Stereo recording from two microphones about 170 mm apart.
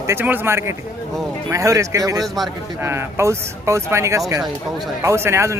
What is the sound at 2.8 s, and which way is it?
Speech, 15° right (ahead or behind).